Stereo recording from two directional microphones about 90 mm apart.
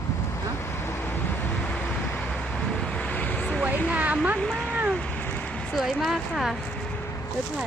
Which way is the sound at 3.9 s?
15° right (ahead or behind).